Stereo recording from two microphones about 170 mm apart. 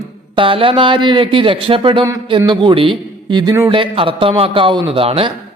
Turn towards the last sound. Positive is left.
turn(degrees=-35)  # may be behind; listen again after turning